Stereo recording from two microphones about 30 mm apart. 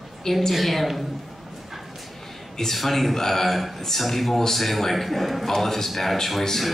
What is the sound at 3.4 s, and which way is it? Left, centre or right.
A man's voice, centre.